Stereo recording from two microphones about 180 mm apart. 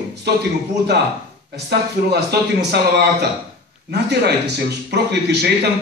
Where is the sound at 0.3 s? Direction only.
65° right (ahead or behind).